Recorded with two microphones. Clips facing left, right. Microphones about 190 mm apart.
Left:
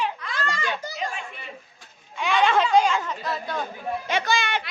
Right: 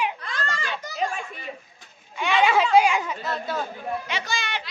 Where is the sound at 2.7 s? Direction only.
10° right (ahead or behind).